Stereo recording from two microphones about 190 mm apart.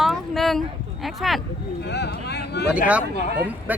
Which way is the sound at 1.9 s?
60° left (ahead or behind).